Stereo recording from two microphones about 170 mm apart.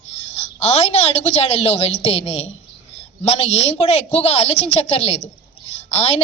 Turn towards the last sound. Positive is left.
turn(degrees=40)  # may be behind; listen again after turning